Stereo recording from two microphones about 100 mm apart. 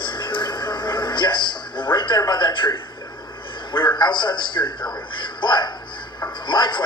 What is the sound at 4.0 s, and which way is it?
Speech, 50° left (ahead or behind).